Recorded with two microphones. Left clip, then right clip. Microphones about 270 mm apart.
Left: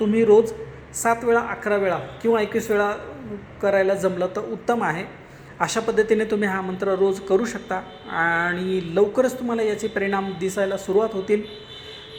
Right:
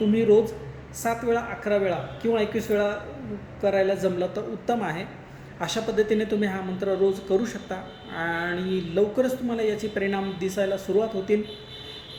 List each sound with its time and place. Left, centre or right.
0.1 s speech: left